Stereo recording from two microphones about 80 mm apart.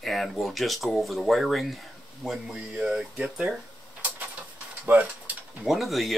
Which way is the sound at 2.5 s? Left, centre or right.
Centre.